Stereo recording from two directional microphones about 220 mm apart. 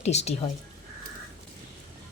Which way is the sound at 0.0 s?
30° left (ahead or behind).